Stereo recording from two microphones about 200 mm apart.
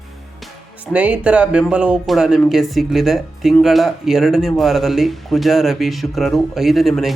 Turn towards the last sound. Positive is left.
turn(degrees=0)  # may be behind; listen again after turning